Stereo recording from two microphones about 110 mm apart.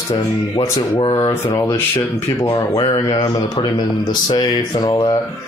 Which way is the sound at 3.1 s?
50° left (ahead or behind).